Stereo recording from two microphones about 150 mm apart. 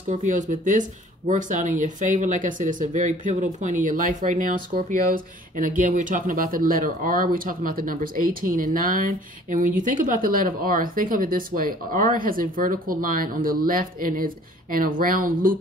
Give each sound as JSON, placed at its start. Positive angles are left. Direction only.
{"t": 0.1, "sound": "speech", "side_deg": -55}